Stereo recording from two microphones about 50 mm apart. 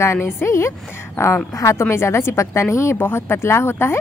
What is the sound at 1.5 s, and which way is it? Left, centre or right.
Speech, left.